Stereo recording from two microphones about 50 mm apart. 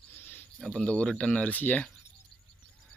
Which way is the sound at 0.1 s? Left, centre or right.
Left.